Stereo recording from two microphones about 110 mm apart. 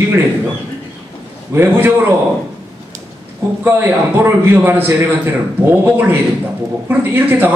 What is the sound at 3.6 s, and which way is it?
A man's voice, 20° right (ahead or behind).